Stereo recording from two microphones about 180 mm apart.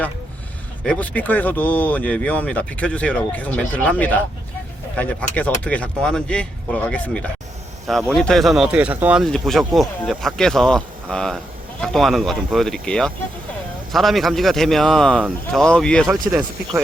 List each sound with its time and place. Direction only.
0.9 s speech: 10° left (ahead or behind); by 9.2 s 10° right (ahead or behind)
9.2 s speech: centre (ahead or behind)
16.0 s speech: 20° right (ahead or behind)